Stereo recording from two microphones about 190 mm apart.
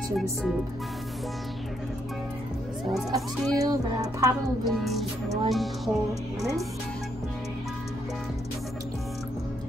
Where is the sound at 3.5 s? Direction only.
20° right (ahead or behind).